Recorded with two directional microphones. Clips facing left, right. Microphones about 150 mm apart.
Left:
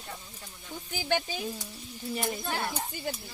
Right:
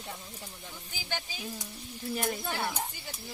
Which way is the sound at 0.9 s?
60° left (ahead or behind).